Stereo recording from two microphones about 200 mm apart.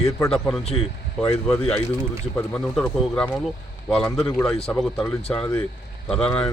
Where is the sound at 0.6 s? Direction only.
30° left (ahead or behind).